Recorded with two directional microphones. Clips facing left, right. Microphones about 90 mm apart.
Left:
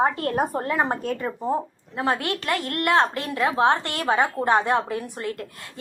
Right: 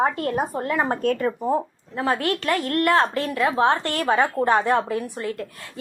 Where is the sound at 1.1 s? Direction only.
5° left (ahead or behind).